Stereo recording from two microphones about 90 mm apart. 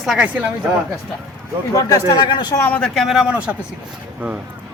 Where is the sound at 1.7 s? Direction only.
45° left (ahead or behind).